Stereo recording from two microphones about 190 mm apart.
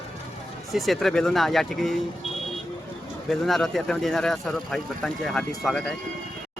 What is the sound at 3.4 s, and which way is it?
Speech, centre (ahead or behind).